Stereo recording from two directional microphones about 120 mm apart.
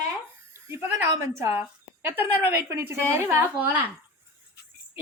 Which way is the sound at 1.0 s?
25° right (ahead or behind).